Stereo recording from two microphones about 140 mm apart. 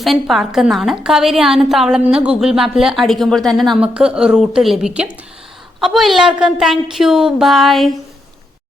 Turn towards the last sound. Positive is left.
turn(degrees=0)  # may be behind; listen again after turning